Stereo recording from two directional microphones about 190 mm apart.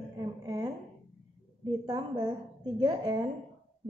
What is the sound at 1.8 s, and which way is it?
A woman's voice, 20° right (ahead or behind).